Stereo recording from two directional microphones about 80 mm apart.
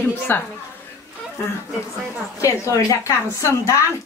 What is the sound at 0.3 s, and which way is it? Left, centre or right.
Speech, left.